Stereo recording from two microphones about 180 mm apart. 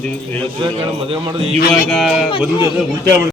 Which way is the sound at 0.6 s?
30° right (ahead or behind).